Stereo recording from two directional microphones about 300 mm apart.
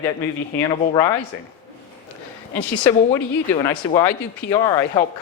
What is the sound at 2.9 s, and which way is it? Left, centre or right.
Speech, centre.